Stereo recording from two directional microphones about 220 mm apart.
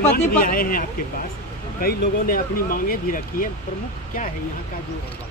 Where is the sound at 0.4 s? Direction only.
40° left (ahead or behind).